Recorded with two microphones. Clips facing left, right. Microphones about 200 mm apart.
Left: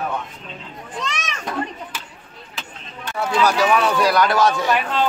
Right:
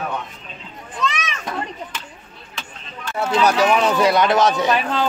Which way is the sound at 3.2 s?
20° right (ahead or behind).